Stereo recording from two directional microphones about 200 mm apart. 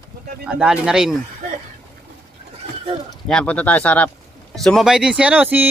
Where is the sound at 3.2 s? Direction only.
5° left (ahead or behind).